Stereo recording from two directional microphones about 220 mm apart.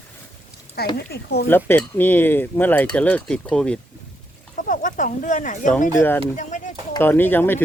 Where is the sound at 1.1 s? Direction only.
45° left (ahead or behind).